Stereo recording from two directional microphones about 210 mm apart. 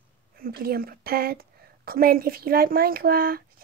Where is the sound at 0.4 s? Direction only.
45° right (ahead or behind).